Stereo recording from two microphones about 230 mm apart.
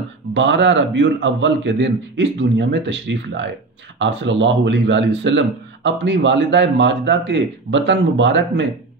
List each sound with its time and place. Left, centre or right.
0.3 s a man's voice: right